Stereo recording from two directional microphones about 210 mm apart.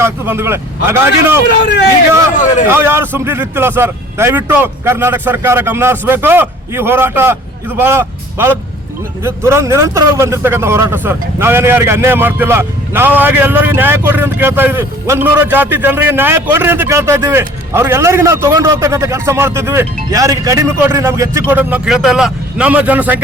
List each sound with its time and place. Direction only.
0.0 s a man's voice: 10° right (ahead or behind)
2.3 s speech: 35° left (ahead or behind)
2.6 s a man's voice: 10° right (ahead or behind)